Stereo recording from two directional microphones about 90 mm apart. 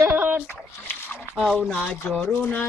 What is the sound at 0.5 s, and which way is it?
Splash, 25° left (ahead or behind).